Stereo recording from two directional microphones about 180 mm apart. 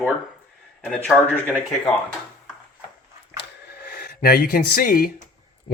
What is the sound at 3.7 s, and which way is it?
Speech, 55° left (ahead or behind).